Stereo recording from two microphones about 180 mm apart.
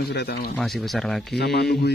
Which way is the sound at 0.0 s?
65° left (ahead or behind).